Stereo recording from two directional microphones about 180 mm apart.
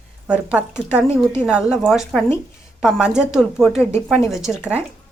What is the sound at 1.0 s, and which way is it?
Speech, 15° left (ahead or behind).